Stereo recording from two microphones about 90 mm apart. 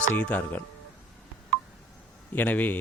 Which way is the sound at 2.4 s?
20° left (ahead or behind).